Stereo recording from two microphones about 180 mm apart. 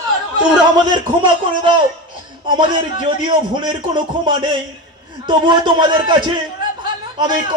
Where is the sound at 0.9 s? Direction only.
30° right (ahead or behind).